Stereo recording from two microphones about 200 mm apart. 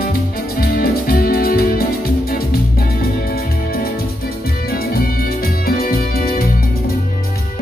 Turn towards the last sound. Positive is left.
turn(degrees=45)  # may be behind; listen again after turning